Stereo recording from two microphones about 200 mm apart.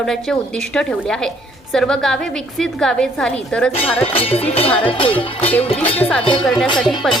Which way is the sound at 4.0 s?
30° left (ahead or behind).